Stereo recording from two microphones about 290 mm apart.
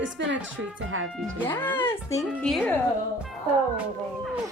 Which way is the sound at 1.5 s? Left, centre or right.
Centre.